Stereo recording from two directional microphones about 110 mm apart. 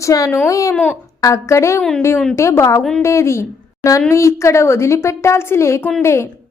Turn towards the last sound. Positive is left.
turn(degrees=25)  # may be behind; listen again after turning